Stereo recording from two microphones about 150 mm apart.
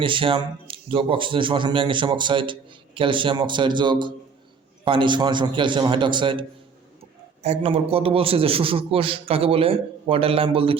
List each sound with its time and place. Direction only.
0.0 s a man's voice: 35° right (ahead or behind)
7.0 s a man's voice: 45° right (ahead or behind)